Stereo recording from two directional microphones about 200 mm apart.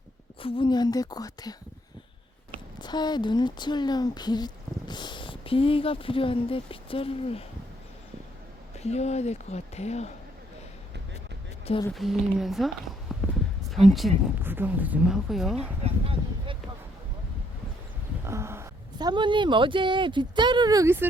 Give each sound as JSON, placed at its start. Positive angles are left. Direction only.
{"t": 0.4, "sound": "speech", "side_deg": 25}
{"t": 2.8, "sound": "speech", "side_deg": 20}
{"t": 8.7, "sound": "speech", "side_deg": 35}
{"t": 11.6, "sound": "speech", "side_deg": 25}
{"t": 11.9, "sound": "a woman's voice", "side_deg": 0}
{"t": 15.8, "sound": "a sound", "side_deg": -30}
{"t": 18.3, "sound": "speech", "side_deg": -15}